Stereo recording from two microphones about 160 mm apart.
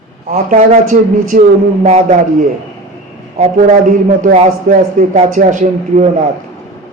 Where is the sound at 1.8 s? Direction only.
45° right (ahead or behind).